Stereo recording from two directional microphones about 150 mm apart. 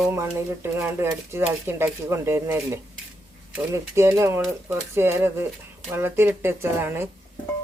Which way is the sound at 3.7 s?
20° right (ahead or behind).